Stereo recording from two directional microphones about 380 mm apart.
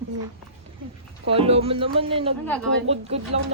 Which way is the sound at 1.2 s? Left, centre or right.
Centre.